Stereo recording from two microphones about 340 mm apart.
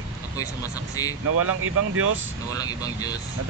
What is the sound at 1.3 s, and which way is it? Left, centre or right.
Speech, right.